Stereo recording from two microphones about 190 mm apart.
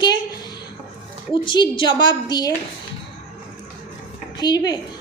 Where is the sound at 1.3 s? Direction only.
25° left (ahead or behind).